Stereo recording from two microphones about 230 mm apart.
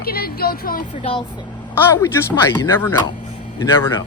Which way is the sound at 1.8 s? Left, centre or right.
Centre.